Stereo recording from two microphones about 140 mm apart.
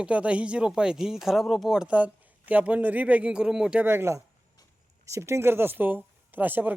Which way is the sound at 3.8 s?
15° right (ahead or behind).